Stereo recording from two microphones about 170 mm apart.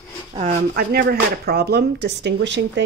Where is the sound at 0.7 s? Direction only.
65° right (ahead or behind).